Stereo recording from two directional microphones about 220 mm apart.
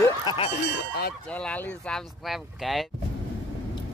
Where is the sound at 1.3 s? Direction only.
5° left (ahead or behind).